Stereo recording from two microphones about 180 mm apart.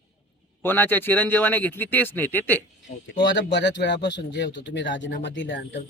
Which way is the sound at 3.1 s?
80° left.